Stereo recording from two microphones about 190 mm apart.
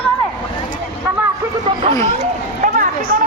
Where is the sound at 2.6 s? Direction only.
45° right (ahead or behind).